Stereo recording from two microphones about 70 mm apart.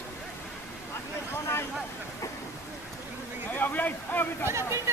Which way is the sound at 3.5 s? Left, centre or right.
Left.